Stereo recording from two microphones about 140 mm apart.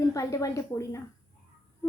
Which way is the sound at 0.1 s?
25° left (ahead or behind).